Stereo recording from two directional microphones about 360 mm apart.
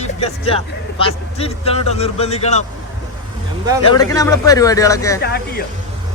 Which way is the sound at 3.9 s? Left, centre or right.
Centre.